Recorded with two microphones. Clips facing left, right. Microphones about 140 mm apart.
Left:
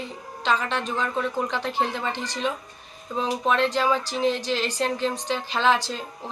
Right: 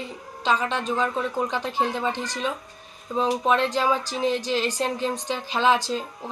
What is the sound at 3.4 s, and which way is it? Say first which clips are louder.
A woman's voice: left 3 dB; 10° right (ahead or behind).